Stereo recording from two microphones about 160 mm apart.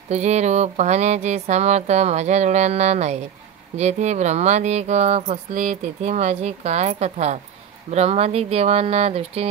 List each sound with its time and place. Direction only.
0.1 s speech: 45° right (ahead or behind)